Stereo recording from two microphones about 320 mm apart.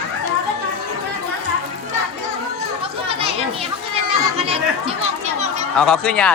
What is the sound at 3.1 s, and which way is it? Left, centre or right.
Children playing, centre.